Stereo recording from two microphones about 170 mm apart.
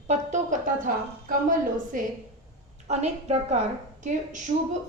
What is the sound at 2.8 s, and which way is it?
A woman's voice, 40° right (ahead or behind).